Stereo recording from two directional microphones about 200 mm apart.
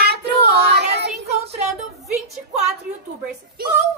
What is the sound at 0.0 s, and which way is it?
Child singing, 55° right (ahead or behind).